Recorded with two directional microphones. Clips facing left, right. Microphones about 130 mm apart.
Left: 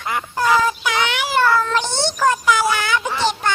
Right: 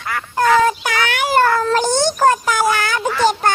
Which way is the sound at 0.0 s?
20° left (ahead or behind).